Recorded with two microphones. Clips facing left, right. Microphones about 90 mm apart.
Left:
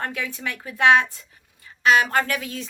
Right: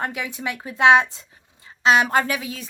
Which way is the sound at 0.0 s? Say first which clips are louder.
Right 2 dB; 15° right (ahead or behind).